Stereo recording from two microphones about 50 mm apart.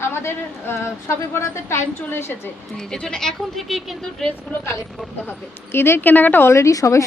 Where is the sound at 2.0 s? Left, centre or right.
Left.